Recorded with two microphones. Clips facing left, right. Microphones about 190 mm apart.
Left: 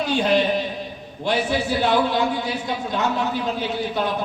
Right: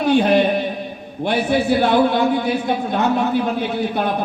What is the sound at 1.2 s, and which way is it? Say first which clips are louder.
A man's voice: right 4 dB; 55° right (ahead or behind).